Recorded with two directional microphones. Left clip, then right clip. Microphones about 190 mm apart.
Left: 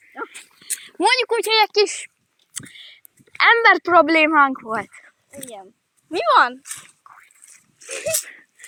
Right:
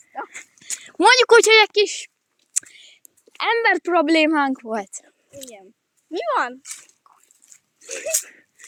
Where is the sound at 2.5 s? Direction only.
40° right (ahead or behind).